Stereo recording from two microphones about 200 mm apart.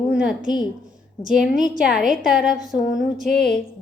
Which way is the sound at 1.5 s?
40° right (ahead or behind).